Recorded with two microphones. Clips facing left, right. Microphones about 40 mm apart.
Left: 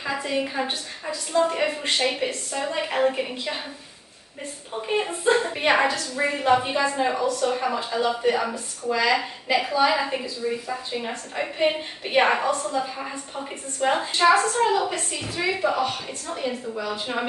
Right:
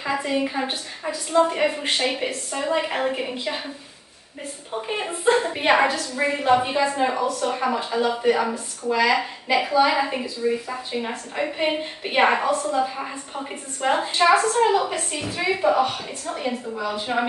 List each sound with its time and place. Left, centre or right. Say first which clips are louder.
0.0 s a woman's voice: right 2 dB; centre
4.8 s a woman's voice: even; centre
15.0 s a woman's voice: right 3 dB; right
15.3 s a woman's voice: right 4 dB; centre